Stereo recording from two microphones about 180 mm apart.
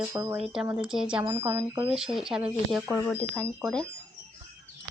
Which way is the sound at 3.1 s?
10° left (ahead or behind).